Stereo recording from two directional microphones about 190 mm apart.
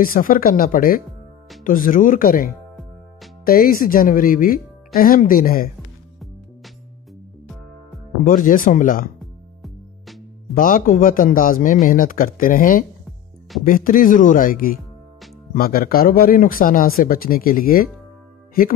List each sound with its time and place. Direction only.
0.0 s speech: 45° left (ahead or behind)
8.3 s speech: 45° left (ahead or behind)
9.2 s music: centre (ahead or behind)
10.5 s speech: 45° left (ahead or behind)